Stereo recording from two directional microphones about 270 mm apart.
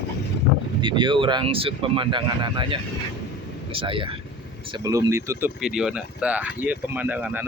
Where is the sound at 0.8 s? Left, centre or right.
Centre.